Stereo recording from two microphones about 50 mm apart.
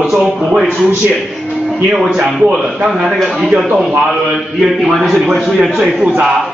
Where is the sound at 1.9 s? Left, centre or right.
Centre.